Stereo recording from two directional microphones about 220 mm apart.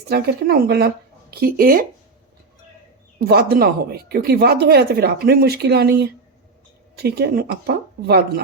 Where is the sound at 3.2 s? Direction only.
45° right (ahead or behind).